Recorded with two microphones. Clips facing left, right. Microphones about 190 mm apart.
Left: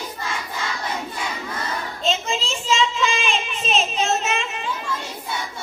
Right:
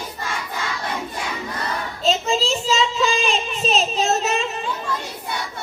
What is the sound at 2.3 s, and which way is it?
Child singing, 35° right (ahead or behind).